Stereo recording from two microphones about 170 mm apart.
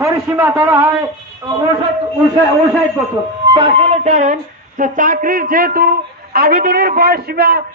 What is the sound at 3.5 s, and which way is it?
Music, 35° right (ahead or behind).